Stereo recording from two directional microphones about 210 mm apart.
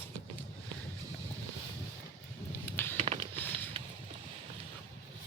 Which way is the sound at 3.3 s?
10° left (ahead or behind).